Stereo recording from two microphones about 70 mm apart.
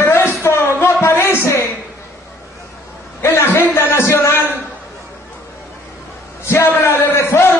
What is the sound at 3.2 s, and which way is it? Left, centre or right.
Speech, left.